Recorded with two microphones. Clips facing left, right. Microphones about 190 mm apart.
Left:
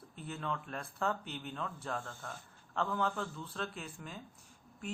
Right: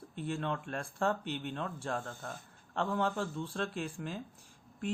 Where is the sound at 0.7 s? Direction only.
30° right (ahead or behind).